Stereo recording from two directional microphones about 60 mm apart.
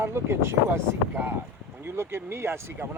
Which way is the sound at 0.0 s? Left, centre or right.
Right.